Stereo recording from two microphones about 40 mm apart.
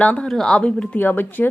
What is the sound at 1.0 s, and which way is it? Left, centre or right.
Speech, left.